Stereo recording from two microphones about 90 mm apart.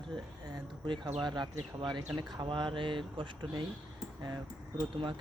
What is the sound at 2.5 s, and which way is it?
Mantra, 70° right (ahead or behind).